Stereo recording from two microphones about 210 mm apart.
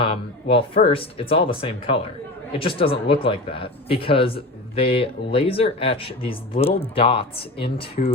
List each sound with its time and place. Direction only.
0.0 s speech: 25° left (ahead or behind)